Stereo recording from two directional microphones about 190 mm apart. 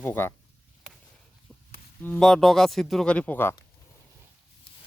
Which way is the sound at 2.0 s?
5° left (ahead or behind).